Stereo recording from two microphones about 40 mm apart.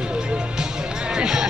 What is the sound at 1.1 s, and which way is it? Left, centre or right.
Speech, centre.